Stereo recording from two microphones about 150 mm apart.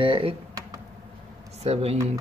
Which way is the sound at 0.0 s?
35° right (ahead or behind).